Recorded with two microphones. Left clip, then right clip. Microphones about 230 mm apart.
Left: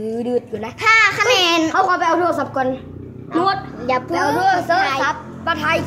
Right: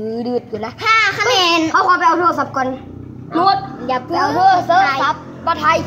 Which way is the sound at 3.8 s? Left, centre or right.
Centre.